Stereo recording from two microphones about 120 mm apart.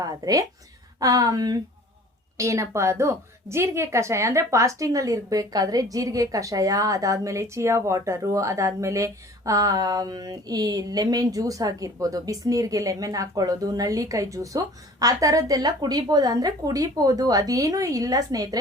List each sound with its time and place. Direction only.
0.0 s a woman's voice: 30° right (ahead or behind)